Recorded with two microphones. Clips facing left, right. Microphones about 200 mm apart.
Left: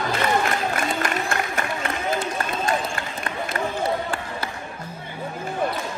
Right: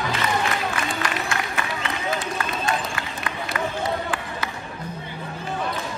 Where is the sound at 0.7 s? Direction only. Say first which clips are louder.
Left 2 dB; 50° left (ahead or behind).